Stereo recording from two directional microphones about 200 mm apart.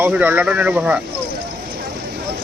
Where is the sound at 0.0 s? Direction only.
10° right (ahead or behind).